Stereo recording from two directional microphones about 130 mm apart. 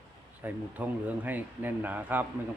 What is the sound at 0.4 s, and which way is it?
Speech, 10° right (ahead or behind).